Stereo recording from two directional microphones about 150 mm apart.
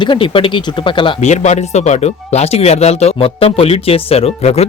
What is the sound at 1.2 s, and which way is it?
Speech, 50° left (ahead or behind).